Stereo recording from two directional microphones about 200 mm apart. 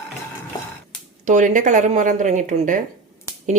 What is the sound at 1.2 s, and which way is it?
Speech, 40° right (ahead or behind).